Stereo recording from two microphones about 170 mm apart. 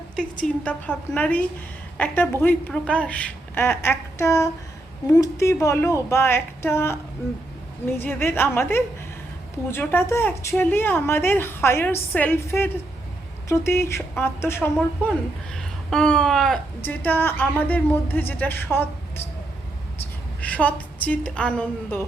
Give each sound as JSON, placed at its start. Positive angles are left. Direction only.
{"t": 0.2, "sound": "a woman's voice", "side_deg": 5}
{"t": 7.9, "sound": "a woman's voice", "side_deg": 10}
{"t": 20.0, "sound": "a sound", "side_deg": 10}